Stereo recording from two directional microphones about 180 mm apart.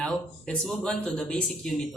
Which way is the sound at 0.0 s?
5° left (ahead or behind).